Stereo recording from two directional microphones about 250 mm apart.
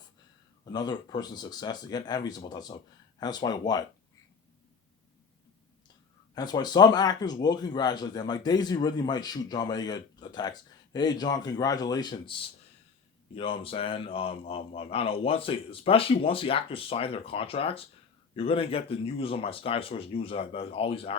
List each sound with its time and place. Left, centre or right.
0.6 s speech: centre
6.3 s a man's voice: centre